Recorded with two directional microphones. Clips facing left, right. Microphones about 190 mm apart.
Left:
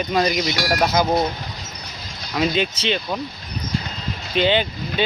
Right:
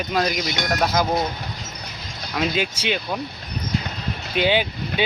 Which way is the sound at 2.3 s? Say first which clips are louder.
Left 3 dB; 5° right (ahead or behind).